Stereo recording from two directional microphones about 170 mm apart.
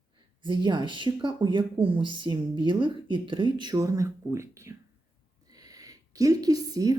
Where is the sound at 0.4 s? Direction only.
25° right (ahead or behind).